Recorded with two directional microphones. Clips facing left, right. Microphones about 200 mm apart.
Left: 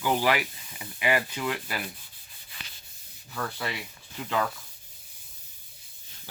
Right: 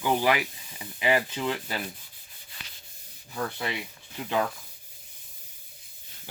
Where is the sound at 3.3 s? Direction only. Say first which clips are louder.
Right 2 dB; 20° right (ahead or behind).